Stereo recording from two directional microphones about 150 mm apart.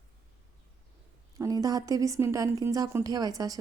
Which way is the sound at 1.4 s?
25° right (ahead or behind).